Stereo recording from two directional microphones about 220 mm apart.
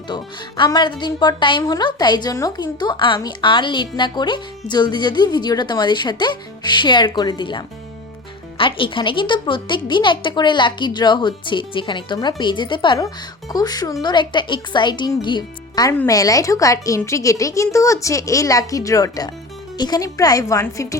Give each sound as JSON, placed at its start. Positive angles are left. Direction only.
{"t": 0.1, "sound": "a woman's voice", "side_deg": 20}